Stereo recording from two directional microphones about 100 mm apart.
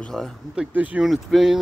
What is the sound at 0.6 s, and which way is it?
Speech, 10° right (ahead or behind).